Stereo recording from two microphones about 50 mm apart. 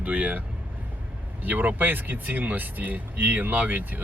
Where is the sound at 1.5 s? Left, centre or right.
Right.